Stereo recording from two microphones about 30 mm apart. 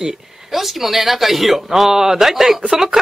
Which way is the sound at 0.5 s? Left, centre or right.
Centre.